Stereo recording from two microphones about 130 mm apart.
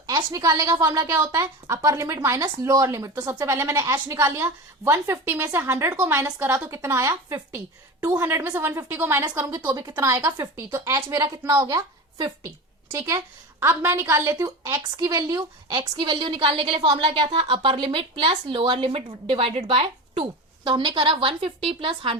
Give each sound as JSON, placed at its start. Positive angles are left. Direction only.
{"t": 0.3, "sound": "a woman's voice", "side_deg": -20}
{"t": 9.6, "sound": "a woman's voice", "side_deg": -30}
{"t": 10.2, "sound": "a woman's voice", "side_deg": -35}
{"t": 10.7, "sound": "a woman's voice", "side_deg": -20}